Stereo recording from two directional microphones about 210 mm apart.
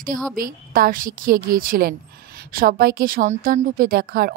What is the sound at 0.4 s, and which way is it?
A woman's voice, 40° right (ahead or behind).